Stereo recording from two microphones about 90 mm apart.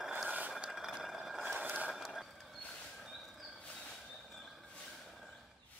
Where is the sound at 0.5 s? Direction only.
5° right (ahead or behind).